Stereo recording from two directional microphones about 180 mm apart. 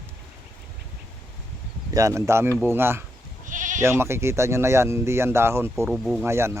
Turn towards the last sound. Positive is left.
turn(degrees=-15)  # may be behind; listen again after turning